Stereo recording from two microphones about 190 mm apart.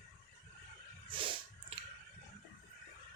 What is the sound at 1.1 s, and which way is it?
Snort, 25° right (ahead or behind).